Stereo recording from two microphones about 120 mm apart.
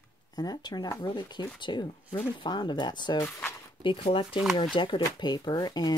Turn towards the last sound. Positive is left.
turn(degrees=35)  # may be behind; listen again after turning